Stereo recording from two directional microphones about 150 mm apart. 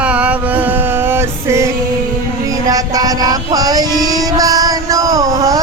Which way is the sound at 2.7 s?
25° right (ahead or behind).